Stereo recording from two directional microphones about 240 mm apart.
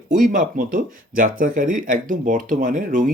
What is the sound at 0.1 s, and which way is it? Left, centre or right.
Speech, right.